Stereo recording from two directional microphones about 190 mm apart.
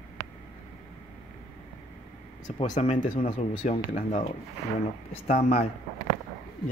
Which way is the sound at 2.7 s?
40° left (ahead or behind).